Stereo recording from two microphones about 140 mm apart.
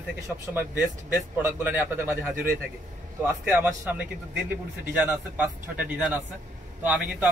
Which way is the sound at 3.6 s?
15° right (ahead or behind).